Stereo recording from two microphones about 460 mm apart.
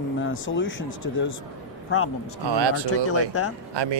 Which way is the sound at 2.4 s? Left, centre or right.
Right.